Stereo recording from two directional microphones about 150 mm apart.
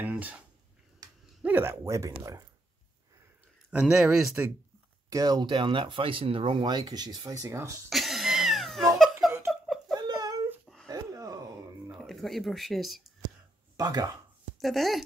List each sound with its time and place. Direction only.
0.0 s speech: 10° right (ahead or behind)
1.4 s speech: 15° right (ahead or behind)
3.7 s speech: centre (ahead or behind)
5.1 s speech: 25° right (ahead or behind)
7.9 s cat: centre (ahead or behind)
8.9 s laughter: centre (ahead or behind)
9.5 s whimper: centre (ahead or behind)
9.9 s a sound: 25° right (ahead or behind)
10.5 s a sound: centre (ahead or behind)
10.9 s a sound: 25° right (ahead or behind)
12.1 s speech: centre (ahead or behind)
13.7 s speech: 25° right (ahead or behind)
14.6 s speech: centre (ahead or behind)